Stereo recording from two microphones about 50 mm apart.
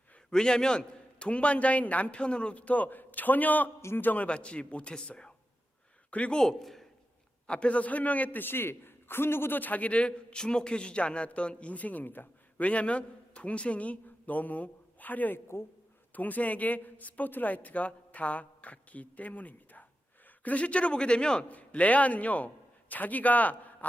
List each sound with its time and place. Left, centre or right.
0.3 s a man's voice: centre; by 4.3 s left
4.3 s a man's voice: left
6.1 s speech: left
6.3 s a man's voice: centre
7.4 s a woman's voice: left
9.6 s a man's voice: left
12.6 s a man's voice: left
21.5 s a man's voice: left